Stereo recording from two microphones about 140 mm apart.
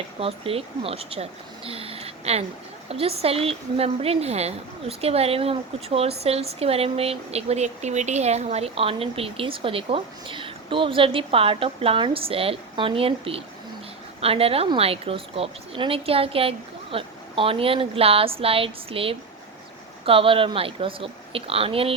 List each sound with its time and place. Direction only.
0.2 s a woman's voice: 45° right (ahead or behind)